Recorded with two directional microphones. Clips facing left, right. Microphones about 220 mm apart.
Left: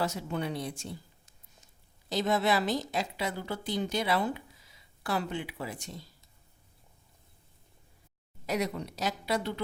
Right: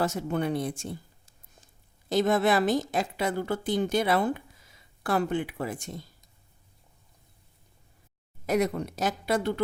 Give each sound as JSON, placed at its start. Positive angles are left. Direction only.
{"t": 0.0, "sound": "a woman's voice", "side_deg": -50}
{"t": 2.0, "sound": "a woman's voice", "side_deg": -50}
{"t": 8.4, "sound": "a woman's voice", "side_deg": -50}